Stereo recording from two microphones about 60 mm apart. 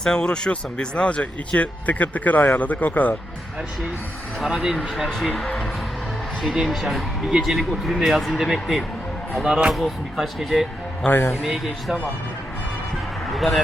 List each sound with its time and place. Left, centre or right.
0.0 s speech: centre; by 3.2 s left
4.4 s speech: centre
5.3 s speech: centre
6.4 s speech: centre
11.0 s a man's voice: left
11.4 s speech: centre
13.3 s speech: centre